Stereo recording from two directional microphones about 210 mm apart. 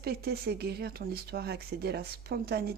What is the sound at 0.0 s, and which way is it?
Speech, 50° right (ahead or behind).